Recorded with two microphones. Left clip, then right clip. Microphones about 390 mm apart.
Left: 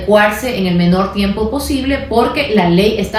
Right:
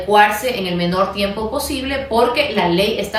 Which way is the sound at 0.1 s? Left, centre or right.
Centre.